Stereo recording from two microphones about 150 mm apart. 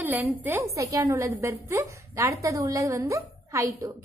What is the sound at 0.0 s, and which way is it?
A woman's voice, 10° right (ahead or behind).